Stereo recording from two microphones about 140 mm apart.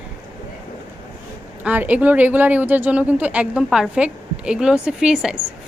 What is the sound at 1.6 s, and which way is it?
Speech, 10° right (ahead or behind).